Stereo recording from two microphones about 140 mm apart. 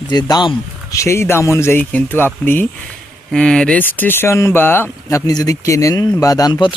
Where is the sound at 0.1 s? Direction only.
30° left (ahead or behind).